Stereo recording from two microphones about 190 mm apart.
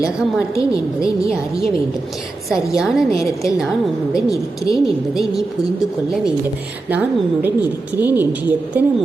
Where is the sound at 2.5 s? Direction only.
5° right (ahead or behind).